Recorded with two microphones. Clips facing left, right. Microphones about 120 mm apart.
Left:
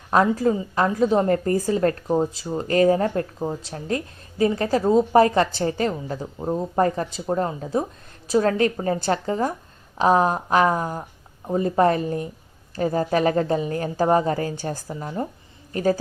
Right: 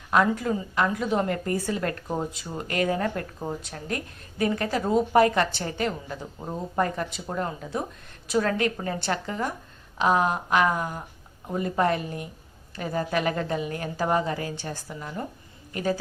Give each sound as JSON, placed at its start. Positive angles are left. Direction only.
{"t": 0.1, "sound": "a woman's voice", "side_deg": 35}
{"t": 14.8, "sound": "speech", "side_deg": 25}
{"t": 15.7, "sound": "a man's voice", "side_deg": 40}